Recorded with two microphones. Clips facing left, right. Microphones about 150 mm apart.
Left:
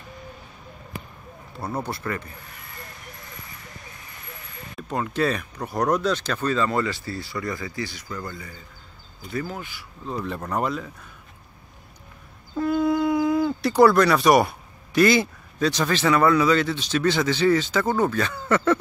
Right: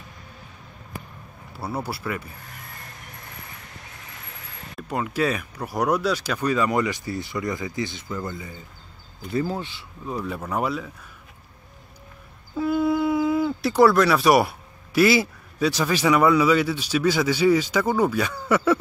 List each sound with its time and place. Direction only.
1.5 s speech: 5° right (ahead or behind)
4.7 s speech: 5° right (ahead or behind); by 9.8 s 30° right (ahead or behind)
10.0 s speech: 5° right (ahead or behind)
12.5 s speech: 5° right (ahead or behind)